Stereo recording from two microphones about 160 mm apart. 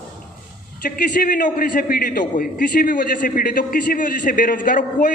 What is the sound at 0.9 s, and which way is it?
A man's voice, 55° left (ahead or behind).